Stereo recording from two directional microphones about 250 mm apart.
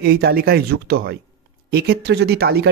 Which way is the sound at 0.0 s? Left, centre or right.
Right.